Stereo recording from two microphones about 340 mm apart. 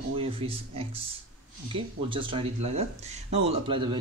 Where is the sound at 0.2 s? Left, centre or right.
Centre.